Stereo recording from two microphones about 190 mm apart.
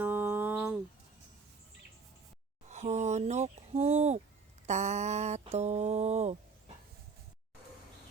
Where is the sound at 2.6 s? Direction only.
35° right (ahead or behind).